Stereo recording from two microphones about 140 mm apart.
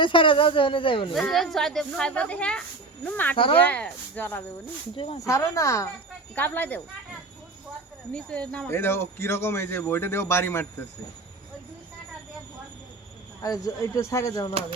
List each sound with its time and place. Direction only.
0.0 s speech: 35° left (ahead or behind)
1.1 s a man's voice: centre (ahead or behind)
3.3 s speech: 35° left (ahead or behind)
3.6 s a man's voice: 10° left (ahead or behind)
4.9 s speech: 45° left (ahead or behind)
5.2 s a man's voice: 20° left (ahead or behind)
8.1 s a man's voice: 10° left (ahead or behind)
8.6 s a man's voice: 20° left (ahead or behind)
13.4 s speech: 25° left (ahead or behind)